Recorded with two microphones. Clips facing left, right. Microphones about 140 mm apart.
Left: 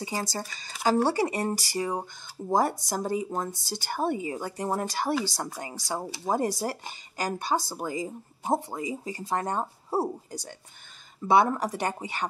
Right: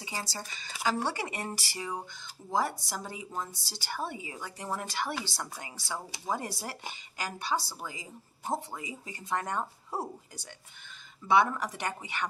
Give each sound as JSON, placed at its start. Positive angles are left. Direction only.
{"t": 0.0, "sound": "speech", "side_deg": 40}